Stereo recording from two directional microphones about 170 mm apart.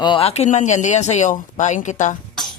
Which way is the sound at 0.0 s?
30° left (ahead or behind).